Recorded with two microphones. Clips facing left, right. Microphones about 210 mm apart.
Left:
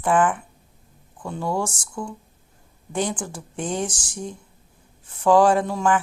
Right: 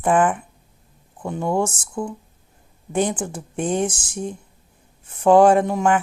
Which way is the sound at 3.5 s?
60° right (ahead or behind).